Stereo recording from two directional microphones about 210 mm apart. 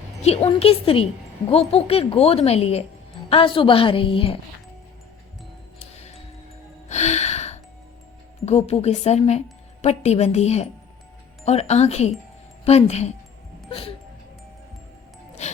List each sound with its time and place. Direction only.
0.4 s a woman's voice: 25° left (ahead or behind)
5.8 s music: 30° left (ahead or behind)
8.4 s a woman's voice: 30° left (ahead or behind)